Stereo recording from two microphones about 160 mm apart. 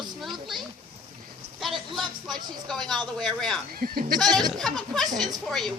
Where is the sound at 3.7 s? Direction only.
65° right (ahead or behind).